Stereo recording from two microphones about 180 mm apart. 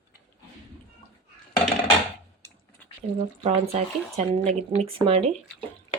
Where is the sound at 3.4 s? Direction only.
35° right (ahead or behind).